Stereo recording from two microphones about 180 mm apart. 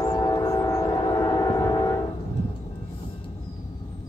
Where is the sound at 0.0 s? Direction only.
20° left (ahead or behind).